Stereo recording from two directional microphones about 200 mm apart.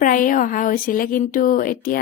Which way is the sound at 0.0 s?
40° left (ahead or behind).